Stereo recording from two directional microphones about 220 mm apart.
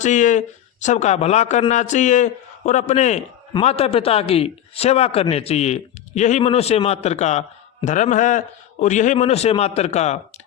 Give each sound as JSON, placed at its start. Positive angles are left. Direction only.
{"t": 0.0, "sound": "a man's voice", "side_deg": 35}